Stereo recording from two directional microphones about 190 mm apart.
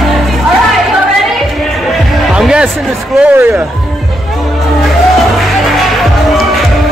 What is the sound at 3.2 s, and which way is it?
Speech, 10° right (ahead or behind).